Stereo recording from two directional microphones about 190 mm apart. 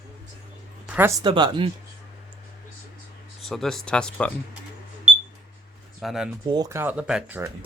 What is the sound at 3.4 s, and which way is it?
Speech, centre (ahead or behind).